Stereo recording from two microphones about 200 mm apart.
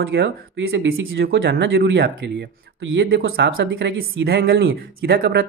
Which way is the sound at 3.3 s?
60° right (ahead or behind).